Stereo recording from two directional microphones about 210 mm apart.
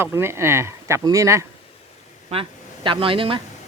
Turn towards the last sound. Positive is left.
turn(degrees=-25)  # may be behind; listen again after turning